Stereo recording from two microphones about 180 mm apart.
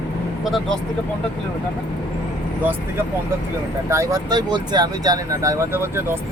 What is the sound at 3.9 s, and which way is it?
Speech, 15° right (ahead or behind).